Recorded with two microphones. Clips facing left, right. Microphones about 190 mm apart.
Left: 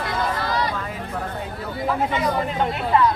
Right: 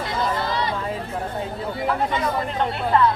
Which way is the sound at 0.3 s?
25° right (ahead or behind).